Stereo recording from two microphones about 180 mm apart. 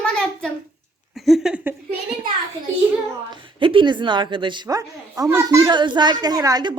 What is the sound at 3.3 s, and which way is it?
A woman's voice, 25° right (ahead or behind).